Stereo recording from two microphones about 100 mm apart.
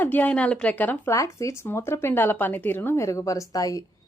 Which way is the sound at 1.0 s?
35° left (ahead or behind).